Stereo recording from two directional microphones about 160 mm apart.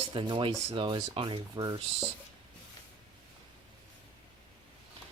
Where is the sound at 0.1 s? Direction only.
30° right (ahead or behind).